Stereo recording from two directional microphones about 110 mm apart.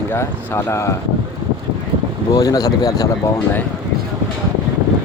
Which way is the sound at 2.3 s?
35° left (ahead or behind).